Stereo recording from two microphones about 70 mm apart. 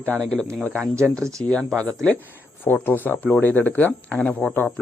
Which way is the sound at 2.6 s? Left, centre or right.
Left.